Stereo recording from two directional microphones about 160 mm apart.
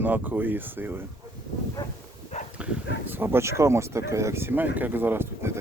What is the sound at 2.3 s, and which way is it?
Dog, 45° left (ahead or behind).